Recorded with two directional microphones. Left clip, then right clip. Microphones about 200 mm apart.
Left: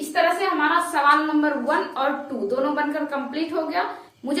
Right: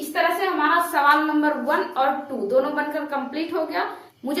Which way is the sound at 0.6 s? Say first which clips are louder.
Right 2 dB; 20° right (ahead or behind).